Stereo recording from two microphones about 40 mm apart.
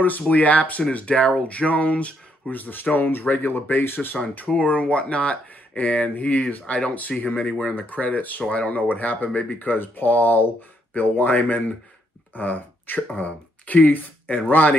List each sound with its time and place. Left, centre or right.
0.3 s speech: left
2.5 s speech: left
4.6 s speech: left
6.6 s speech: left
7.0 s speech: left
7.7 s speech: left
8.5 s speech: left
8.7 s speech: left
11.0 s speech: left
13.1 s speech: left